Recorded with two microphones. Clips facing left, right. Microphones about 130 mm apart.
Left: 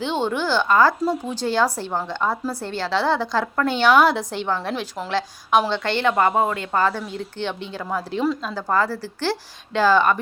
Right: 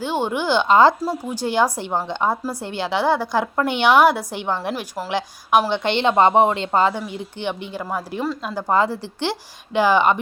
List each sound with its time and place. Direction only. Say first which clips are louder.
0.0 s a woman's voice: right 1 dB; 10° right (ahead or behind)
1.0 s a woman's voice: left 1 dB; 10° right (ahead or behind)
5.8 s speech: right 3 dB; 20° right (ahead or behind)
8.5 s speech: right 2 dB; 20° right (ahead or behind)